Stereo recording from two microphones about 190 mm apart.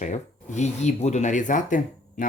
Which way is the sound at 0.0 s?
40° left (ahead or behind).